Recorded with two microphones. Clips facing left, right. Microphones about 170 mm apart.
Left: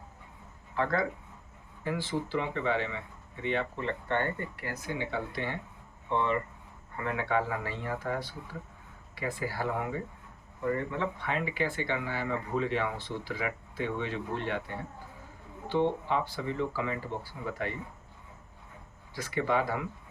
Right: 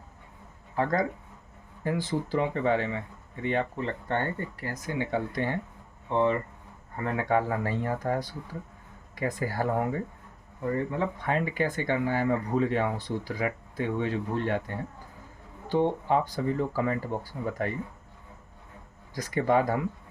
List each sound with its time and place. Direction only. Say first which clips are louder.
0.8 s speech: right 3 dB; 40° right (ahead or behind)
11.2 s speech: right 4 dB; 45° right (ahead or behind)
15.7 s speech: right 3 dB; 45° right (ahead or behind)
19.1 s speech: right 5 dB; 40° right (ahead or behind)